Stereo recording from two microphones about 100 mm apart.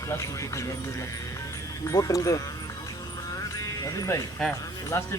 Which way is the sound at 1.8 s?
35° left (ahead or behind).